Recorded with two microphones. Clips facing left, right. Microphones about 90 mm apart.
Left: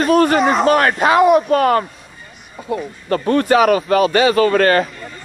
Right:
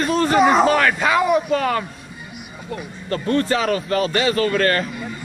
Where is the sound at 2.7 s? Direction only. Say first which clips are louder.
Left 8 dB; 15° left (ahead or behind).